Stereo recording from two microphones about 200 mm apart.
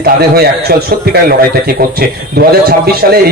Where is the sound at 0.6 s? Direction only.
50° right (ahead or behind).